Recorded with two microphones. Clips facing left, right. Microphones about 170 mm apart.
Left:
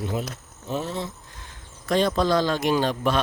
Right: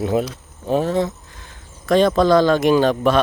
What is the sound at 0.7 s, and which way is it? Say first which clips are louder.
Speech: right 10 dB; 60° right (ahead or behind).